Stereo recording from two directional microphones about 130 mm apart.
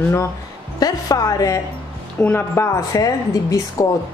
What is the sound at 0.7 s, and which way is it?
A woman's voice, 30° left (ahead or behind).